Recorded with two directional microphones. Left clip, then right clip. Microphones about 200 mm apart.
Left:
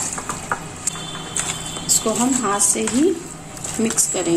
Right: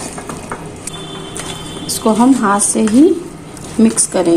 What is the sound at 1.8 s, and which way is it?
A woman's voice, 25° right (ahead or behind).